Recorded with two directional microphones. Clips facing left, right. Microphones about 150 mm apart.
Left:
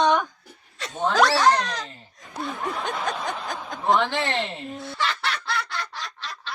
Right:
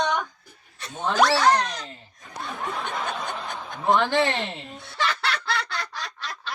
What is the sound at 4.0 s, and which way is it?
Speech, centre (ahead or behind).